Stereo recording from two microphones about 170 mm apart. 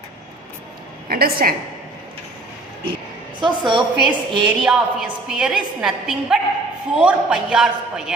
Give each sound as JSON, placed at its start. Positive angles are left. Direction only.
{"t": 1.1, "sound": "a woman's voice", "side_deg": -60}
{"t": 3.4, "sound": "a woman's voice", "side_deg": -25}
{"t": 3.9, "sound": "a woman's voice", "side_deg": -5}